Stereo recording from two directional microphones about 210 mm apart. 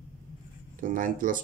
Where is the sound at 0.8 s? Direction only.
40° right (ahead or behind).